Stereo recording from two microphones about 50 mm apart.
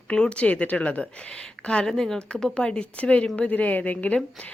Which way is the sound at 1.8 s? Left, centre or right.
Centre.